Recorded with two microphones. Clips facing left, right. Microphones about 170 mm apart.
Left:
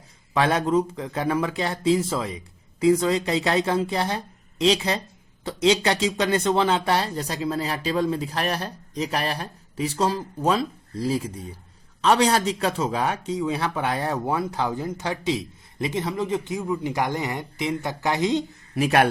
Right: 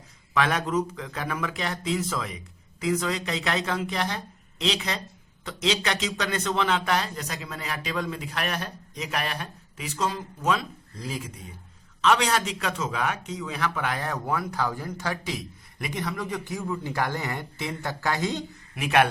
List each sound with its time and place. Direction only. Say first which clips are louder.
0.3 s speech: left 4 dB; 30° left (ahead or behind)
18.7 s speech: left 3 dB; 35° left (ahead or behind)